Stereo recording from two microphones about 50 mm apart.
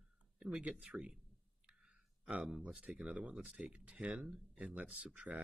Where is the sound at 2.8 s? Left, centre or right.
Right.